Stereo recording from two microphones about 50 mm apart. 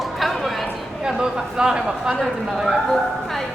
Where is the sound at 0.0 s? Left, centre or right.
Centre.